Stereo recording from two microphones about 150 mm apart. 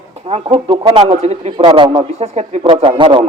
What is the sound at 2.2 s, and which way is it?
A man's voice, 45° right (ahead or behind).